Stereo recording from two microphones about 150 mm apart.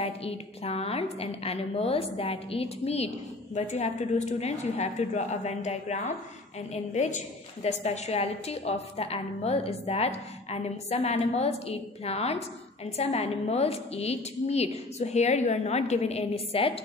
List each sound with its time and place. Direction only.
0.0 s a woman's voice: 40° left (ahead or behind)